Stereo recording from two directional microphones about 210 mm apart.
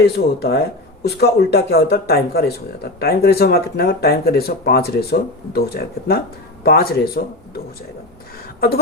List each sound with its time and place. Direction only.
0.0 s speech: 50° left (ahead or behind)